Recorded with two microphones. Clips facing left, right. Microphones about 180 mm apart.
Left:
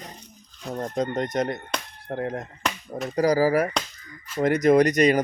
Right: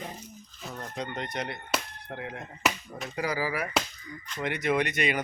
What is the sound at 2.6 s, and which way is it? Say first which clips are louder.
Speech: right 1 dB; 5° right (ahead or behind).